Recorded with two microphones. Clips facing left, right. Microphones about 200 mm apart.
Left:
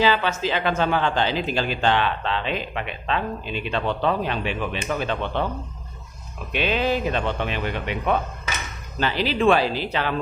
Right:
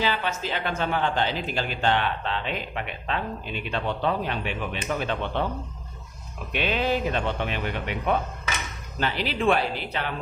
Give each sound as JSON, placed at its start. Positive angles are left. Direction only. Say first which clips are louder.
{"t": 0.0, "sound": "speech", "louder": "left 6 dB", "side_deg": 90}
{"t": 6.5, "sound": "speech", "louder": "left 2 dB", "side_deg": 90}